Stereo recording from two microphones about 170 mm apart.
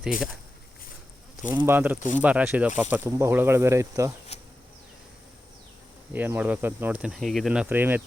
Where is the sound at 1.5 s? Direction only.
15° right (ahead or behind).